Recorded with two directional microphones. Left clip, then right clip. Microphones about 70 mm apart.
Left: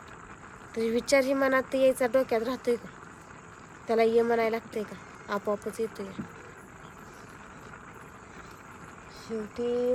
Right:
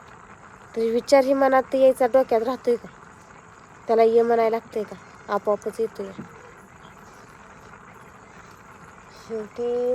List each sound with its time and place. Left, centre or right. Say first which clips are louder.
0.7 s speech: right 7 dB; centre
3.8 s speech: right 6 dB; centre
9.3 s speech: right 4 dB; left